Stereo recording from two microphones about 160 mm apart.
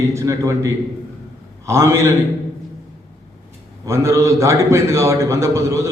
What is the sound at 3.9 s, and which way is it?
A man's voice, 20° right (ahead or behind).